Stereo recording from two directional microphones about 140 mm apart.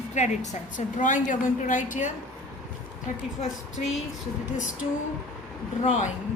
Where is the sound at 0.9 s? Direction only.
65° left (ahead or behind).